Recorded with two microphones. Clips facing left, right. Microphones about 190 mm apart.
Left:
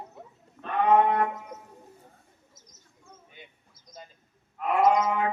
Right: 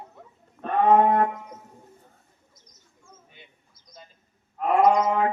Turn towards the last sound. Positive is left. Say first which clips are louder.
# right 3 dB
turn(degrees=-35)  # may be behind; listen again after turning